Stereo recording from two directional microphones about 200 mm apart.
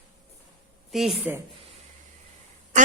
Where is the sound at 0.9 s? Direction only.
Centre (ahead or behind).